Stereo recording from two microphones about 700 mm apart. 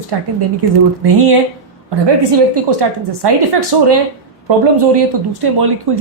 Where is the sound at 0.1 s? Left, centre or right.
Right.